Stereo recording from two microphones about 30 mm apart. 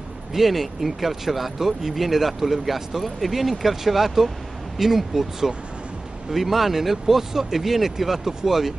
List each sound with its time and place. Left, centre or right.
0.3 s speech: centre